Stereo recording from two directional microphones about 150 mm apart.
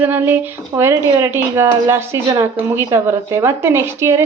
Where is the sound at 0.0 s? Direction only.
15° right (ahead or behind).